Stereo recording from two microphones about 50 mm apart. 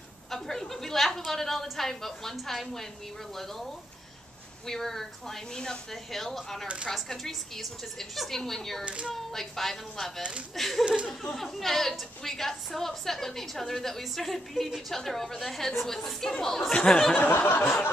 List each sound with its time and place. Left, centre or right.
0.3 s a woman's voice: centre
4.6 s a woman's voice: centre
8.8 s a child's voice: right
9.1 s a woman's voice: centre
17.3 s a sound: left